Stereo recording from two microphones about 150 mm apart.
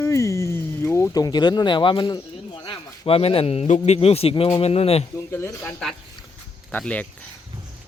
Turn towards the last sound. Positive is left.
turn(degrees=10)  # may be behind; listen again after turning